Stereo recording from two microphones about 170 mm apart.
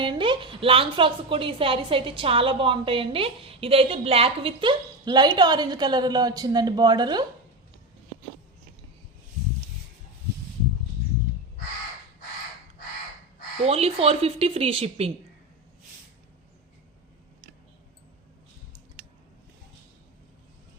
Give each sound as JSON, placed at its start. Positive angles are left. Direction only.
{"t": 0.0, "sound": "a woman's voice", "side_deg": -30}
{"t": 13.7, "sound": "a woman's voice", "side_deg": -35}